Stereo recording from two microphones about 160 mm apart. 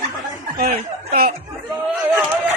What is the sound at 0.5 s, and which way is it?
Speech, 50° right (ahead or behind).